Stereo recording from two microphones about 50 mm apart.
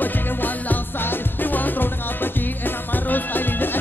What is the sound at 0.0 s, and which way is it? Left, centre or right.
Music, left.